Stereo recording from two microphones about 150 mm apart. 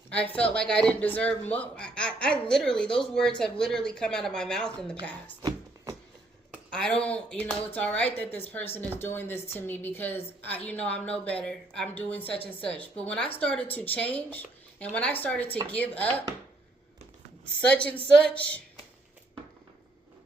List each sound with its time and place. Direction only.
0.1 s a man's voice: 10° left (ahead or behind)
5.4 s a sound: 25° right (ahead or behind)
6.7 s a woman's voice: 5° left (ahead or behind)
18.1 s a man's voice: 5° left (ahead or behind)